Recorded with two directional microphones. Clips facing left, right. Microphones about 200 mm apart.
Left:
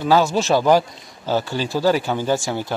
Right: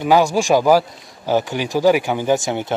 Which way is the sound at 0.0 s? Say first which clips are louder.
Right 2 dB; 15° right (ahead or behind).